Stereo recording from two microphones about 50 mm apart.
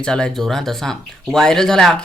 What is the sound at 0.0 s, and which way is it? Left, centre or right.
Speech, centre.